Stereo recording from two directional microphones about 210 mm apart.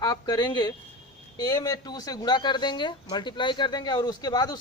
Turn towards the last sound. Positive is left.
turn(degrees=20)  # may be behind; listen again after turning